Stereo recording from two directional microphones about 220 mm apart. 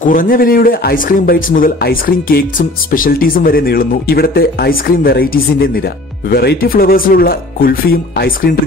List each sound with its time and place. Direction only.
0.0 s speech: 40° left (ahead or behind)